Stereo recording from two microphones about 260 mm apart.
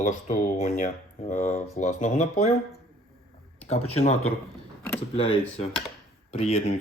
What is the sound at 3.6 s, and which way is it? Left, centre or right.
Speech, left.